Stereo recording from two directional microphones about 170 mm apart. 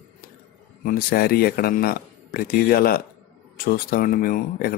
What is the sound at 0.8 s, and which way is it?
Speech, 60° left (ahead or behind).